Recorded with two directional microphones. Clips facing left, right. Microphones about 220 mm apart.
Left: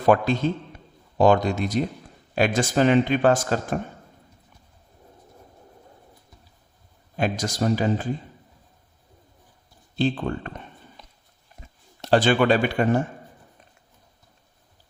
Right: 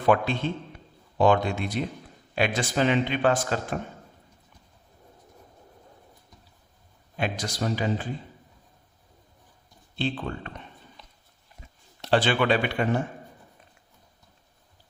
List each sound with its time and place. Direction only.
0.0 s speech: 40° left (ahead or behind)
7.2 s speech: 45° left (ahead or behind)
9.9 s speech: 45° left (ahead or behind)
12.0 s speech: 45° left (ahead or behind)